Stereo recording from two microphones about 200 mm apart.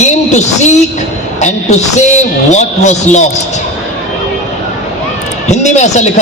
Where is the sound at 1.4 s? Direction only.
35° left (ahead or behind).